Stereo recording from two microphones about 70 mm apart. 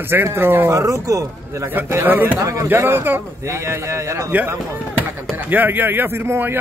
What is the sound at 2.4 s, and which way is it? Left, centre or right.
Speech, right.